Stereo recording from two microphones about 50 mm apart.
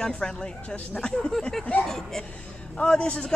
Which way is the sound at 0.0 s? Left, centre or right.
Centre.